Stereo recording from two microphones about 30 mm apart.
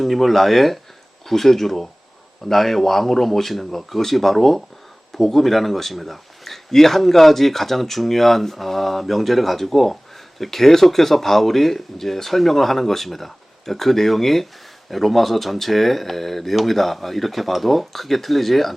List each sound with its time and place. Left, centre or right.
0.0 s speech: centre